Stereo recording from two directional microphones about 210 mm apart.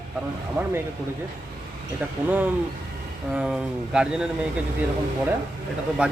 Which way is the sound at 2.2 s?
10° right (ahead or behind).